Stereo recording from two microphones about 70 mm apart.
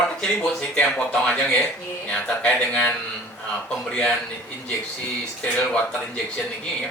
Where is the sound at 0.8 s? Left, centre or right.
Centre.